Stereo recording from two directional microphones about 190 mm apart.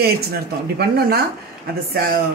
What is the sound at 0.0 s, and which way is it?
Speech, 55° right (ahead or behind).